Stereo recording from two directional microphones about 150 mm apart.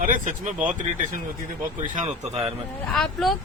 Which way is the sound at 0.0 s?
60° right (ahead or behind).